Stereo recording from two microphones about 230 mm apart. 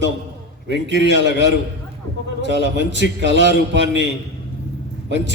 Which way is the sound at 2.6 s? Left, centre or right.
Right.